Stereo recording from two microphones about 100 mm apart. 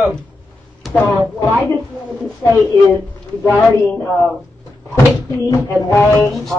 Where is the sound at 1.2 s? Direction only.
15° right (ahead or behind).